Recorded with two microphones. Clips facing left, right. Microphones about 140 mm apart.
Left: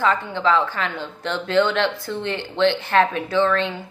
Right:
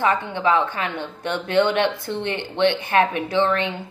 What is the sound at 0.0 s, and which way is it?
Speech, 15° right (ahead or behind).